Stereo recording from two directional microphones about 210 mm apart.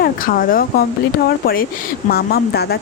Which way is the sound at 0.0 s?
40° left (ahead or behind).